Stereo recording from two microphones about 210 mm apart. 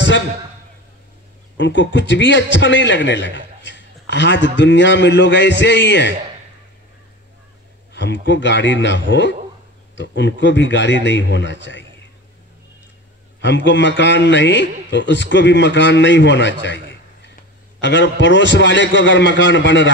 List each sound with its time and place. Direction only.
1.6 s a man's voice: 60° left (ahead or behind)
7.9 s a man's voice: 55° left (ahead or behind)
13.4 s a man's voice: 60° left (ahead or behind)